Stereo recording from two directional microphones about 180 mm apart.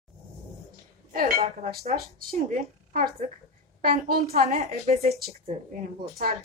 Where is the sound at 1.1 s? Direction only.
55° right (ahead or behind).